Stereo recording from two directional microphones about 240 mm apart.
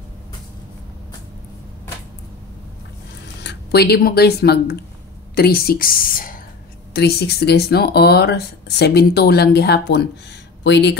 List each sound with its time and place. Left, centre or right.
3.3 s speech: left